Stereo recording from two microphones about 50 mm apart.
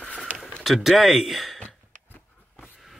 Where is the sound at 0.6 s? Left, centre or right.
Centre.